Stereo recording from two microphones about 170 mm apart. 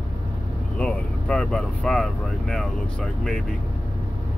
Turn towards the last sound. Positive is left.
turn(degrees=5)  # may be behind; listen again after turning